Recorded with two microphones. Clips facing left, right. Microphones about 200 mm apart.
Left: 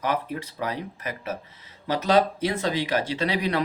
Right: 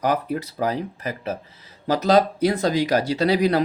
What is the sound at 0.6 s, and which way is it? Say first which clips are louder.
Speech: right 5 dB; 35° right (ahead or behind).